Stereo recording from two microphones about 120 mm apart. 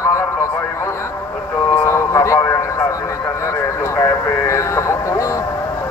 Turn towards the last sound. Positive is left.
turn(degrees=25)  # may be behind; listen again after turning